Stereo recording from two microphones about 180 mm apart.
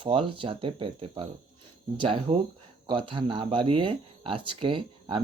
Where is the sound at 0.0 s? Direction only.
30° right (ahead or behind).